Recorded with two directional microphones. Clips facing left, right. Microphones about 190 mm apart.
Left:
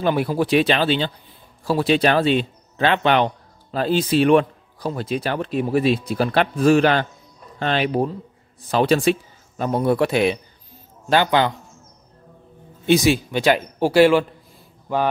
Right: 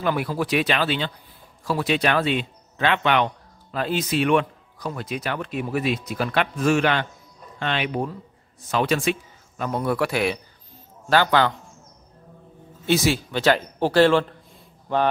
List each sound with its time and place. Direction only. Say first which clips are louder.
0.0 s speech: left 4 dB; 30° left (ahead or behind)
12.8 s speech: left 4 dB; 15° left (ahead or behind)